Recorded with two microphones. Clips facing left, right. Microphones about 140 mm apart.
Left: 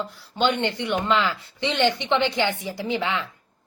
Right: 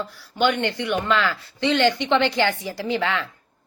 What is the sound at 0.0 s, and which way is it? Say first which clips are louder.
A woman's voice: right 2 dB; 20° left (ahead or behind).